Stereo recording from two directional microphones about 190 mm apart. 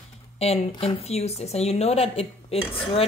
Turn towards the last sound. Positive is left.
turn(degrees=30)  # may be behind; listen again after turning